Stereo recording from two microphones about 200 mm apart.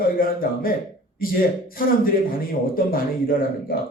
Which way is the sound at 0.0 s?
45° left (ahead or behind).